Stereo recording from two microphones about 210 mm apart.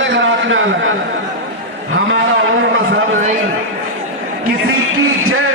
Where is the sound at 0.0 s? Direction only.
60° right (ahead or behind).